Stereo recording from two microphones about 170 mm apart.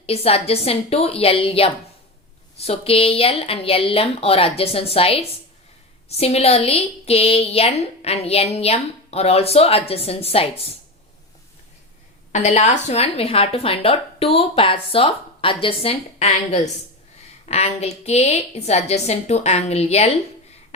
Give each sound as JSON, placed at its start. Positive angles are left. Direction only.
{"t": 0.0, "sound": "a woman's voice", "side_deg": 35}
{"t": 12.3, "sound": "a woman's voice", "side_deg": 40}